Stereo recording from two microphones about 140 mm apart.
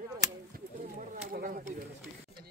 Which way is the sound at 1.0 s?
75° right (ahead or behind).